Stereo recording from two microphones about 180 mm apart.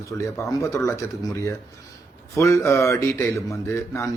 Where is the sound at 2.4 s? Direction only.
15° left (ahead or behind).